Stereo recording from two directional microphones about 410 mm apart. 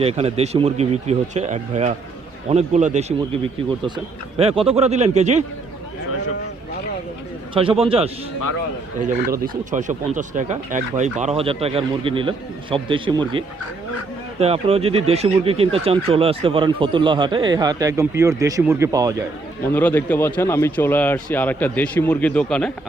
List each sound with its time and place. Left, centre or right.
0.0 s speech: centre
7.5 s speech: centre
9.4 s speech: centre
19.6 s a man's voice: centre